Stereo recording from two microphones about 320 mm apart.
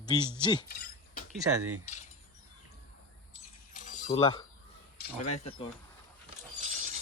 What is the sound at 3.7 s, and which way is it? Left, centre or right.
Keys jangling, left.